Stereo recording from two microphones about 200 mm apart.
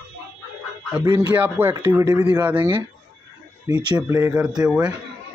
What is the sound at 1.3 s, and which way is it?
A man's voice, 10° right (ahead or behind).